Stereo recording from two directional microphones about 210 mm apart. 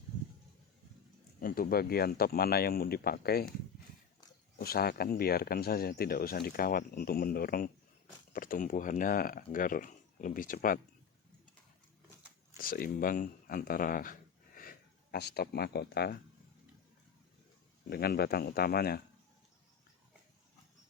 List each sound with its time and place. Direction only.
1.4 s speech: 45° left (ahead or behind)
4.5 s speech: 45° left (ahead or behind)
12.5 s speech: 45° left (ahead or behind)
17.8 s speech: 45° left (ahead or behind)